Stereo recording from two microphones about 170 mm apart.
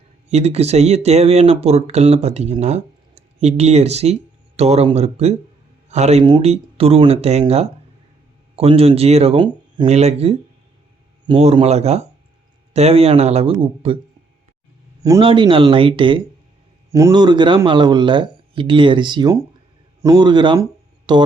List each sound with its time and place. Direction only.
0.3 s speech: 40° right (ahead or behind)
15.2 s speech: 30° right (ahead or behind)